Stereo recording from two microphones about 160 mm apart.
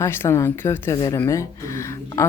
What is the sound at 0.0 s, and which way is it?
Speech, 15° left (ahead or behind).